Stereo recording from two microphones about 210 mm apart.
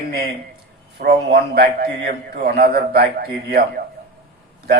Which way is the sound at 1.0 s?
45° right (ahead or behind).